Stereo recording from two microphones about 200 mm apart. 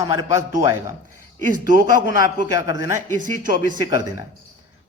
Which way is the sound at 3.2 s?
45° right (ahead or behind).